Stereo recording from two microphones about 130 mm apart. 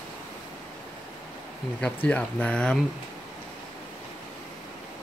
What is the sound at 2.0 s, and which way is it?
Speech, 10° left (ahead or behind).